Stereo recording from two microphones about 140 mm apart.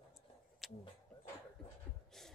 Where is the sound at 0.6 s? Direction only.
Centre (ahead or behind).